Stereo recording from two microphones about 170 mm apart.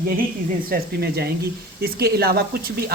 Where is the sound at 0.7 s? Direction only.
65° right (ahead or behind).